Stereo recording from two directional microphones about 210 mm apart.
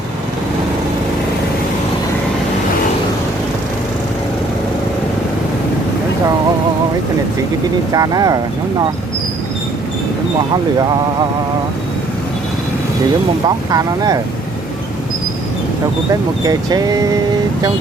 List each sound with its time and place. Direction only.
7.9 s speech: 15° right (ahead or behind)
13.7 s speech: 15° right (ahead or behind)
16.4 s speech: 20° right (ahead or behind)